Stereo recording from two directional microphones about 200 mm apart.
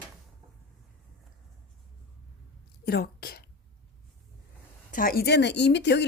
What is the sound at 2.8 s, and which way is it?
Speech, 50° left (ahead or behind).